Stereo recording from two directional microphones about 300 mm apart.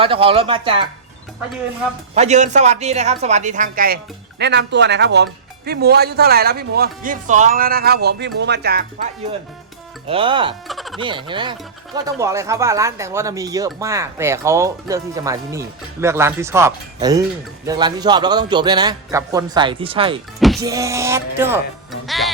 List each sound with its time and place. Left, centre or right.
0.0 s speech: centre
2.1 s speech: right
10.1 s speech: centre
10.7 s fowl: centre
11.0 s speech: centre
22.0 s music: centre